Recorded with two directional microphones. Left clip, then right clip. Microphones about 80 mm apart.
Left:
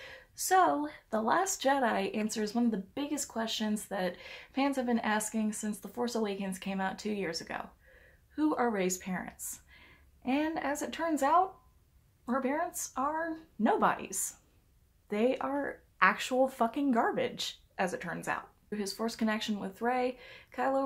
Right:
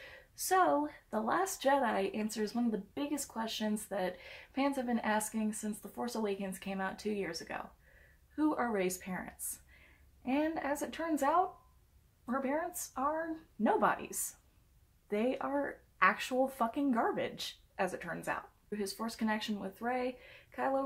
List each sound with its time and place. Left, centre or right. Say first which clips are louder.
0.0 s a woman's voice: left 4 dB; left